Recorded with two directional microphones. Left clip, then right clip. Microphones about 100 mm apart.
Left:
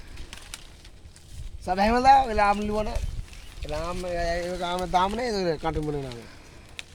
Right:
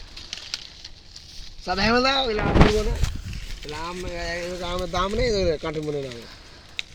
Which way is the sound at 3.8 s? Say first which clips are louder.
Left 2 dB; 70° left (ahead or behind).